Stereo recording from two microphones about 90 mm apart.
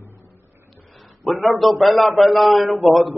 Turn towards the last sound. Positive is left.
turn(degrees=0)  # may be behind; listen again after turning